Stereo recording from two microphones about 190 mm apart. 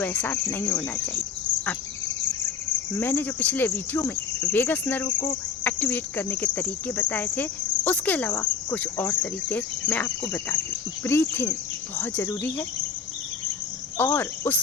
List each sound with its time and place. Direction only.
0.0 s cricket: 10° left (ahead or behind)
2.9 s cricket: 10° left (ahead or behind)
14.0 s cricket: 10° left (ahead or behind)